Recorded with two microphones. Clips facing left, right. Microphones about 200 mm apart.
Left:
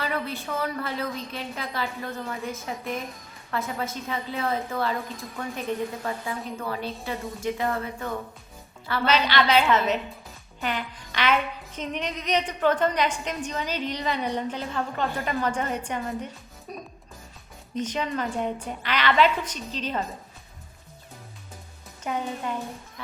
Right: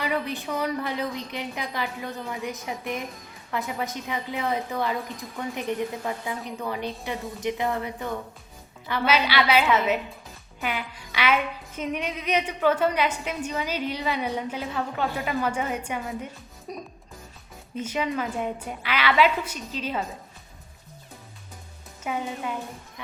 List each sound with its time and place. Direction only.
0.0 s music: 15° right (ahead or behind)
2.0 s a woman's voice: centre (ahead or behind)
2.3 s music: 15° right (ahead or behind)
22.0 s music: 5° right (ahead or behind)